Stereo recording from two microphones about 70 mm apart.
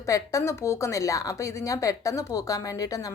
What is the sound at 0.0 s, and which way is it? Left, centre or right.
A woman's voice, left.